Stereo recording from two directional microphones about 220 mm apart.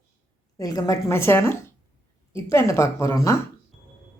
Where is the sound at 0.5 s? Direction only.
15° left (ahead or behind).